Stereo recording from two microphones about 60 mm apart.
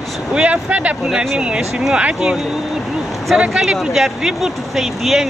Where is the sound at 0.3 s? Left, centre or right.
Right.